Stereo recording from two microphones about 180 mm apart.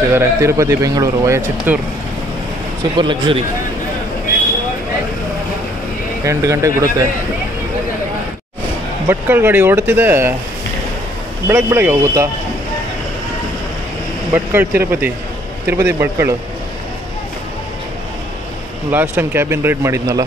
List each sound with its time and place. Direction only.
0.1 s speech: 15° right (ahead or behind)
3.0 s speech: 25° right (ahead or behind)
6.2 s speech: 15° right (ahead or behind)
9.0 s speech: 10° right (ahead or behind)
11.4 s speech: 10° right (ahead or behind)
14.3 s speech: 10° right (ahead or behind)
18.9 s speech: 10° right (ahead or behind)